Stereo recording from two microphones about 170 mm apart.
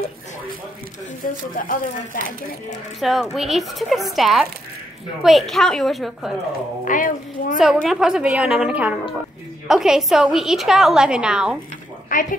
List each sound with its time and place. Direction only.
1.2 s speech: 55° left (ahead or behind)
3.0 s a woman's voice: centre (ahead or behind)
6.8 s speech: 50° left (ahead or behind)
7.6 s a woman's voice: centre (ahead or behind)
12.1 s a woman's voice: 55° left (ahead or behind)